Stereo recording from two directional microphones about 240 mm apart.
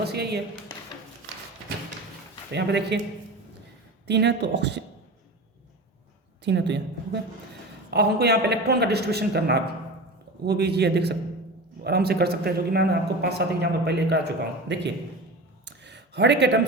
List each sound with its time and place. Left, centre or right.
0.0 s speech: right
2.5 s a man's voice: right
4.0 s a man's voice: right
6.4 s a man's voice: right
15.6 s a sound: right